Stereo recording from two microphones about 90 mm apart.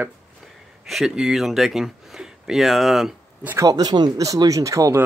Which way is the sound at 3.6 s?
45° right (ahead or behind).